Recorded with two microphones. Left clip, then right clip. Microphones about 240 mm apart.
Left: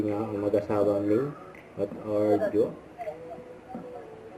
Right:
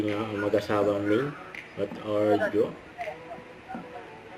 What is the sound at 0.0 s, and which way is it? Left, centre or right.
Speech, right.